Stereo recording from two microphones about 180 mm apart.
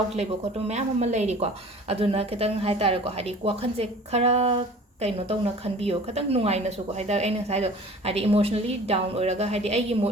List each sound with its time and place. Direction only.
0.7 s a woman's voice: 40° right (ahead or behind)